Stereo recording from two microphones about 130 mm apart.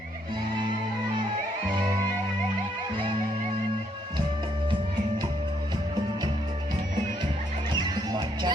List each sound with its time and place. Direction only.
7.8 s music: 35° right (ahead or behind)